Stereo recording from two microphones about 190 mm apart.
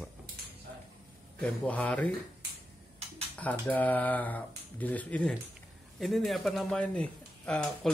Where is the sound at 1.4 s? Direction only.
5° left (ahead or behind).